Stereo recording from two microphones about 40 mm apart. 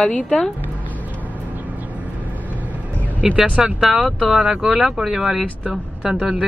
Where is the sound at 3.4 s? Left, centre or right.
Right.